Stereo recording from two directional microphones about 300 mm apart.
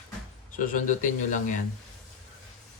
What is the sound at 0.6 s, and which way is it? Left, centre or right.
Speech, left.